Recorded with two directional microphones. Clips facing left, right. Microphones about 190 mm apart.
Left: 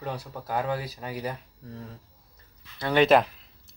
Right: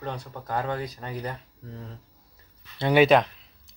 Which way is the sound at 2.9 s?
Centre (ahead or behind).